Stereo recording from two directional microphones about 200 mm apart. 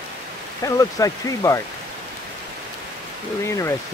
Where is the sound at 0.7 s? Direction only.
15° left (ahead or behind).